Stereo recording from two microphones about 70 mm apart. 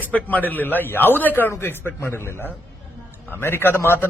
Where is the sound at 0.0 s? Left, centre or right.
Left.